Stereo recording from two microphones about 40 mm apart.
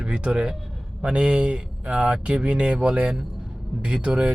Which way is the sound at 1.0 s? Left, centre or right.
Right.